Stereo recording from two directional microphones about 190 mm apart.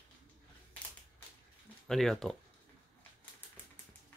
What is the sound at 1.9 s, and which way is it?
Speech, centre (ahead or behind).